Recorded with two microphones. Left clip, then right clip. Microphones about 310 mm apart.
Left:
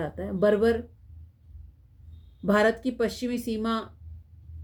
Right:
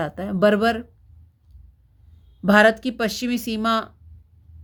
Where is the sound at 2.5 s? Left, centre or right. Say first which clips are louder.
Right 7 dB; right.